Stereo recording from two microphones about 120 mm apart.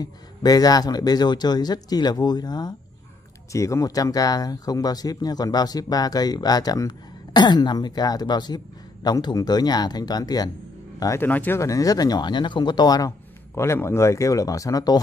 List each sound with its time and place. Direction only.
0.0 s speech: 30° left (ahead or behind)
11.2 s speech: 15° left (ahead or behind); by 13.1 s 35° left (ahead or behind)
13.6 s speech: 20° left (ahead or behind)